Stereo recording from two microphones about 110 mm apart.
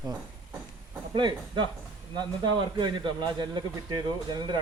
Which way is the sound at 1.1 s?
45° right (ahead or behind).